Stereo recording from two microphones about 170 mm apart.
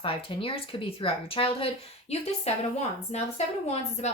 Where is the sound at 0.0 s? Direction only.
30° left (ahead or behind).